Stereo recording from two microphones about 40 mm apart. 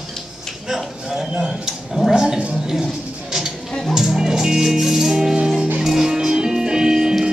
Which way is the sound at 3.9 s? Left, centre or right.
Centre.